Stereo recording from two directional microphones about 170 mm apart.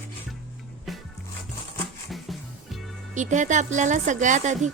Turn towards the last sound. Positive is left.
turn(degrees=-45)  # may be behind; listen again after turning